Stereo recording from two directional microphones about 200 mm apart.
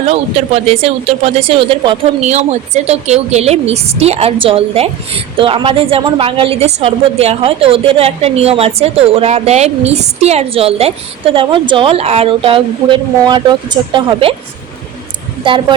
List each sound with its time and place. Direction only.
0.1 s speech: 30° right (ahead or behind)